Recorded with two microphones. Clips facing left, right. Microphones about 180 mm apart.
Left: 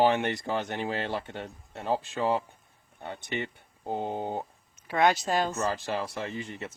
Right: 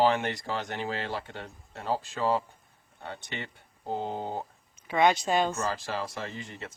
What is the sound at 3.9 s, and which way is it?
Speech, 15° left (ahead or behind).